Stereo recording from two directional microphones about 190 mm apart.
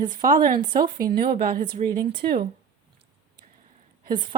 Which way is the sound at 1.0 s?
50° right (ahead or behind).